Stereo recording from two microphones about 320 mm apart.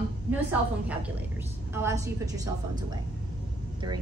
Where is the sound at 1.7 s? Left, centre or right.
Centre.